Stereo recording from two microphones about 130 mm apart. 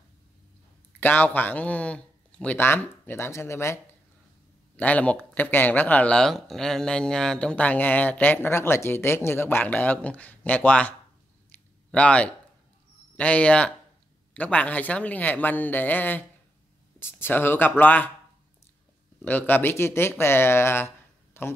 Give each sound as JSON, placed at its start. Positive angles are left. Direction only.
{"t": 0.9, "sound": "speech", "side_deg": 15}
{"t": 11.5, "sound": "a sound", "side_deg": 10}
{"t": 13.1, "sound": "speech", "side_deg": 10}
{"t": 19.2, "sound": "speech", "side_deg": 15}